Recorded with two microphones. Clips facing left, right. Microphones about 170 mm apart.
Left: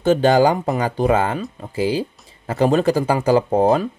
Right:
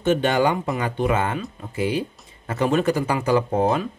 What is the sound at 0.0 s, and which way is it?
Speech, 35° left (ahead or behind).